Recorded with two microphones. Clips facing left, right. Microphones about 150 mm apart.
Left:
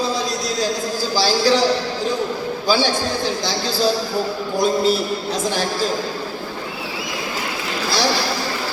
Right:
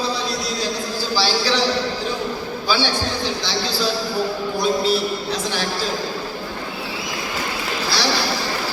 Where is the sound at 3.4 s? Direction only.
45° left (ahead or behind).